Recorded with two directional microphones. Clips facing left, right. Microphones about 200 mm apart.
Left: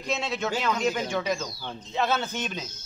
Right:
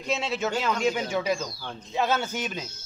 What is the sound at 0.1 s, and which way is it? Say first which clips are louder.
A man's voice: right 1 dB; 5° right (ahead or behind).